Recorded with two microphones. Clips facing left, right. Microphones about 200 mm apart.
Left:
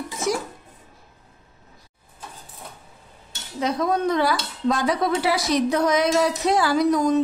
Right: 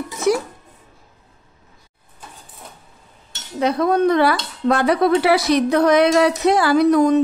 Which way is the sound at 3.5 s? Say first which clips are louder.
Right 5 dB; 60° right (ahead or behind).